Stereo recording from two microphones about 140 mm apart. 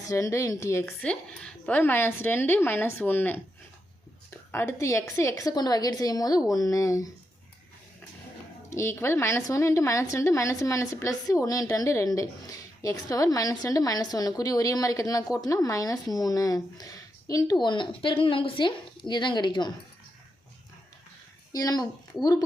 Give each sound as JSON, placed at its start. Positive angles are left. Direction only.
{"t": 0.1, "sound": "a woman's voice", "side_deg": 25}
{"t": 8.7, "sound": "a woman's voice", "side_deg": 20}
{"t": 21.5, "sound": "a woman's voice", "side_deg": 25}